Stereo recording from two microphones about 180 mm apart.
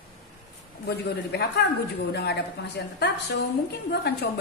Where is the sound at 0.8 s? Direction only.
65° left (ahead or behind).